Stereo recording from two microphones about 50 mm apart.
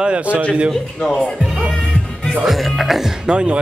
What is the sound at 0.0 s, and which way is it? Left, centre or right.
Speech, right.